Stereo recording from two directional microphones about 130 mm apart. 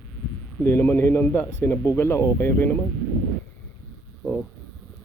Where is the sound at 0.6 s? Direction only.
15° left (ahead or behind).